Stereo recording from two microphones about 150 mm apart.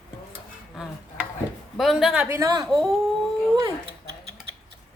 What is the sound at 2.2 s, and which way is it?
Speech, 20° right (ahead or behind).